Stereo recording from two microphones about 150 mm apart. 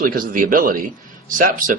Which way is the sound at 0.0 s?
70° right (ahead or behind).